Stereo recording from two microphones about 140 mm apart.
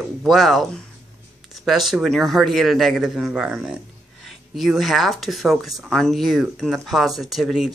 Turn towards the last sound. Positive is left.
turn(degrees=0)  # may be behind; listen again after turning